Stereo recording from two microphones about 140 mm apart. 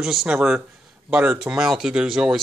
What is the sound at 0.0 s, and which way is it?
Speech, 5° right (ahead or behind).